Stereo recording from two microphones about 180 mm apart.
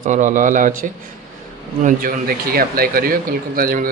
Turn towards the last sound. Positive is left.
turn(degrees=-55)  # may be behind; listen again after turning